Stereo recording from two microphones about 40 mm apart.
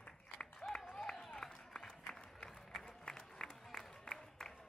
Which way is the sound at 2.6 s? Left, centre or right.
Centre.